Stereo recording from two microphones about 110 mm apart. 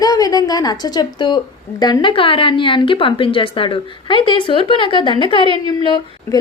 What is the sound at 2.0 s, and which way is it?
A woman's voice, 55° left (ahead or behind).